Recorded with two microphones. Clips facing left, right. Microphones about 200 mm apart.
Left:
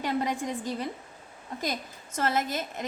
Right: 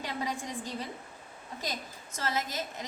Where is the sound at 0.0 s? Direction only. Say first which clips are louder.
Left 7 dB; 55° left (ahead or behind).